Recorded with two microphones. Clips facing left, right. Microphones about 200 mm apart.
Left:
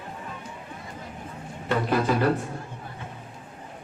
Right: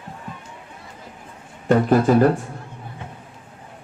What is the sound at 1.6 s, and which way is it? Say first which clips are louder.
Speech: right 8 dB; 45° right (ahead or behind).